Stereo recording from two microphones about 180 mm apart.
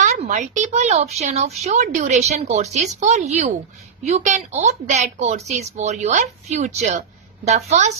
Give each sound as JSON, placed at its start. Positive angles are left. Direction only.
{"t": 0.0, "sound": "speech", "side_deg": -40}